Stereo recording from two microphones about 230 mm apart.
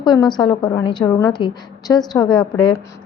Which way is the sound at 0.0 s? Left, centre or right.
Centre.